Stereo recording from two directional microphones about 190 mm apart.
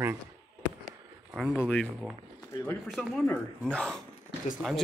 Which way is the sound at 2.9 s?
Centre (ahead or behind).